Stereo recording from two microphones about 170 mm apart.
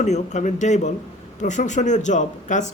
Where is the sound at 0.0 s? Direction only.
45° left (ahead or behind).